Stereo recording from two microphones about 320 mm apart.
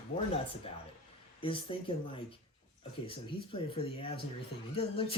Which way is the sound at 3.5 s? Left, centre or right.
Centre.